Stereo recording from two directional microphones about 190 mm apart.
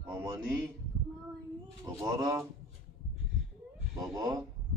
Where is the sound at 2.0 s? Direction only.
15° right (ahead or behind).